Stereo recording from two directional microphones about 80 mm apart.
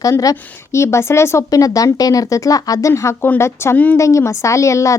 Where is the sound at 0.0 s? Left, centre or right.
Left.